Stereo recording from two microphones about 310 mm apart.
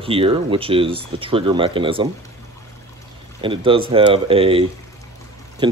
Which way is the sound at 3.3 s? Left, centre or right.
Centre.